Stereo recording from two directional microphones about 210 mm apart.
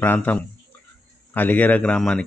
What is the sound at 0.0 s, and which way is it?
Speech, 10° left (ahead or behind).